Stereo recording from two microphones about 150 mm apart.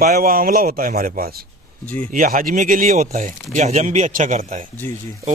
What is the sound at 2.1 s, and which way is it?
A man's voice, 70° right (ahead or behind).